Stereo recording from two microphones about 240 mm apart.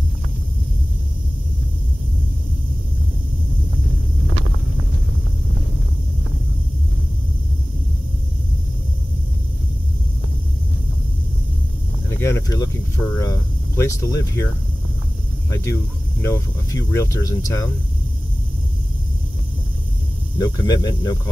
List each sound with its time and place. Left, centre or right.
12.2 s a sound: centre
15.5 s speech: centre
20.3 s speech: centre